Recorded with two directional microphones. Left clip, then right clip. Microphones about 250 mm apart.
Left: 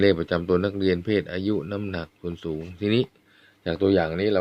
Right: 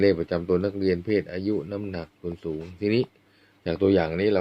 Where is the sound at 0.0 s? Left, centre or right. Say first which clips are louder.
Left 1 dB; left.